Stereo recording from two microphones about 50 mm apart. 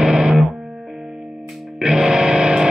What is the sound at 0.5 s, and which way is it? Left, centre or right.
Music, right.